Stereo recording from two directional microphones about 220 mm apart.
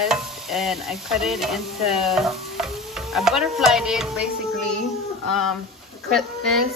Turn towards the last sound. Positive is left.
turn(degrees=0)  # may be behind; listen again after turning